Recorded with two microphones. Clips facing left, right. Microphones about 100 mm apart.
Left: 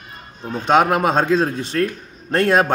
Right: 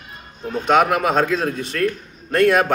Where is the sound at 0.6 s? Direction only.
30° left (ahead or behind).